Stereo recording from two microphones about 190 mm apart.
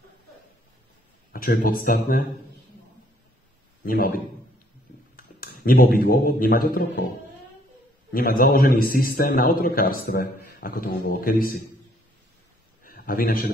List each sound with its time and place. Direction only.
1.3 s speech: 50° left (ahead or behind)
3.8 s a man's voice: 50° left (ahead or behind)
5.1 s a man's voice: 50° left (ahead or behind)
8.1 s a man's voice: 50° left (ahead or behind)
12.8 s a sound: 50° left (ahead or behind)